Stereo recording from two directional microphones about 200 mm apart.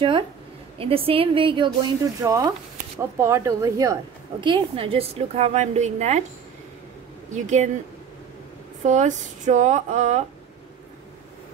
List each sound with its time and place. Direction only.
0.7 s speech: 30° right (ahead or behind)
7.2 s speech: 35° right (ahead or behind)
8.8 s speech: 35° right (ahead or behind)